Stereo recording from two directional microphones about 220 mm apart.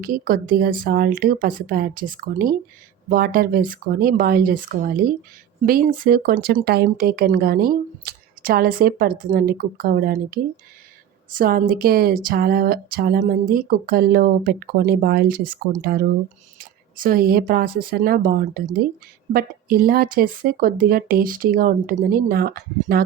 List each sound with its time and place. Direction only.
0.0 s speech: 40° right (ahead or behind)